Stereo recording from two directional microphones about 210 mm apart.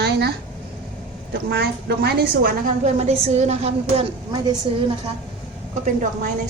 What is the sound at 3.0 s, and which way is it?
A woman's voice, 30° right (ahead or behind).